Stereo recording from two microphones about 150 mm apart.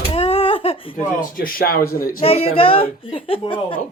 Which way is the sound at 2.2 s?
40° left (ahead or behind).